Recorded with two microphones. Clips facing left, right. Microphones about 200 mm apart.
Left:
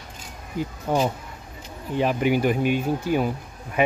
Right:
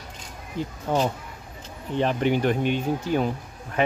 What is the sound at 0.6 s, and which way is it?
Speech, 10° left (ahead or behind).